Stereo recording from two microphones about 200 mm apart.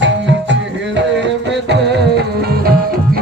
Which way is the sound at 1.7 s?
60° right (ahead or behind).